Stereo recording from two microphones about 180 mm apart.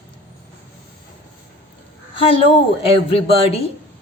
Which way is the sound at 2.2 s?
30° left (ahead or behind).